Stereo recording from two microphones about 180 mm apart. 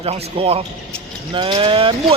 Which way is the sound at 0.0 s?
35° right (ahead or behind).